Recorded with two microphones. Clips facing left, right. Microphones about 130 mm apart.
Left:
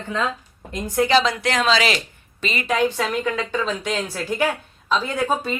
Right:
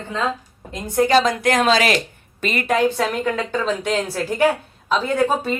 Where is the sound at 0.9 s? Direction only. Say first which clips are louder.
Right 2 dB; 45° right (ahead or behind).